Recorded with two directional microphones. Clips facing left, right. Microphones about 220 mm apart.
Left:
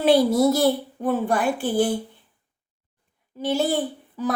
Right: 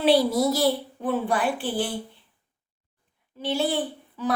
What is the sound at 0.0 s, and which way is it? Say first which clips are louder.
Speech: left 3 dB; 50° left (ahead or behind).